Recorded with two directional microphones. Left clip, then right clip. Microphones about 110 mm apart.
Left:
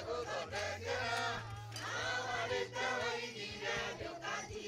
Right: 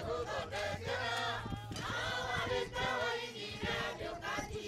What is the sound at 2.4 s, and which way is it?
Choir, 15° right (ahead or behind).